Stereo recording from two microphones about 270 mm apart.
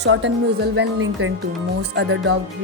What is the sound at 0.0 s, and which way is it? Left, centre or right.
Speech, right.